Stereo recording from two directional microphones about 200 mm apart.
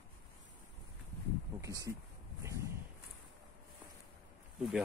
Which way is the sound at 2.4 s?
15° right (ahead or behind).